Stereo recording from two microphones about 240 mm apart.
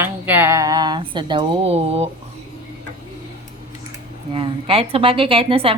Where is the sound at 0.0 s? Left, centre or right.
Centre; by 2.0 s right.